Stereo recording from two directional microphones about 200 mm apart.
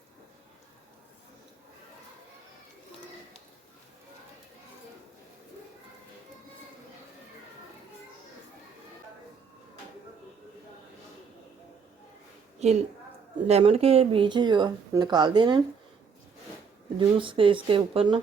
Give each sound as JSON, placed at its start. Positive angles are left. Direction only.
{"t": 12.6, "sound": "a woman's voice", "side_deg": -35}
{"t": 17.0, "sound": "speech", "side_deg": -25}